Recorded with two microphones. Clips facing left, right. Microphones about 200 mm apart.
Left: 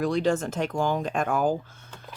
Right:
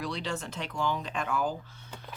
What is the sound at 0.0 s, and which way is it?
Speech, 50° left (ahead or behind).